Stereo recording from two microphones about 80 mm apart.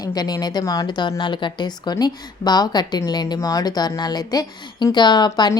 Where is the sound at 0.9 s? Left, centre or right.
Left.